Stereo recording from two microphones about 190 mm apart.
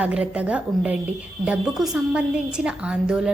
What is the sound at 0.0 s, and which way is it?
A woman's voice, 5° right (ahead or behind).